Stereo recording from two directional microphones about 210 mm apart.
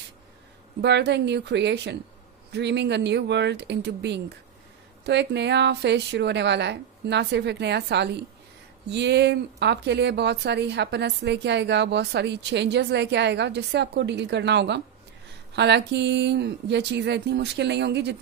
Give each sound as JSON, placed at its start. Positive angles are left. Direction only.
{"t": 0.7, "sound": "a woman's voice", "side_deg": -55}